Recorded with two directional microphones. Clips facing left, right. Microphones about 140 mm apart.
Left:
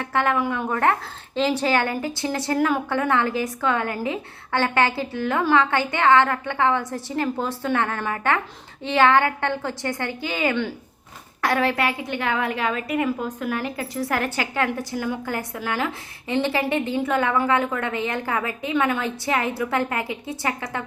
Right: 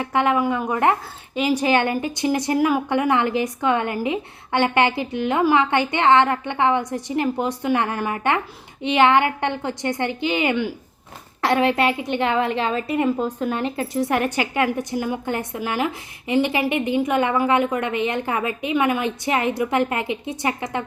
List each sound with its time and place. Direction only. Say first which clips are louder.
0.0 s a woman's voice: right 3 dB; 15° right (ahead or behind)